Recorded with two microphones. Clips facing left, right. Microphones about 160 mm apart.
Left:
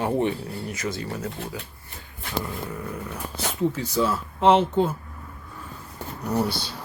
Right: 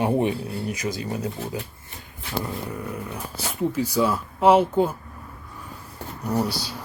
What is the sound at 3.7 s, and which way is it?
Speech, 10° right (ahead or behind).